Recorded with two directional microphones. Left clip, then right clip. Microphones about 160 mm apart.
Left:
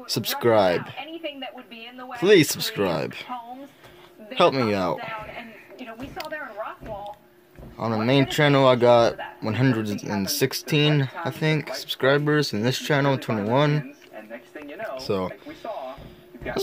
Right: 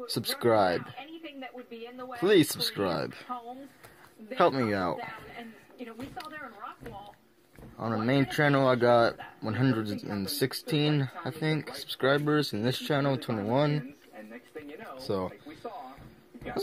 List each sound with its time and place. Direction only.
0.1 s speech: centre (ahead or behind)
2.1 s speech: centre (ahead or behind)
4.4 s speech: centre (ahead or behind)
7.7 s speech: 5° left (ahead or behind)
9.9 s speech: 35° left (ahead or behind)
10.4 s speech: 5° left (ahead or behind)
15.0 s speech: centre (ahead or behind)